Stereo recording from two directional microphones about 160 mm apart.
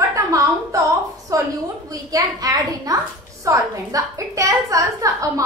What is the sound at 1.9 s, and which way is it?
A woman's voice, 20° right (ahead or behind).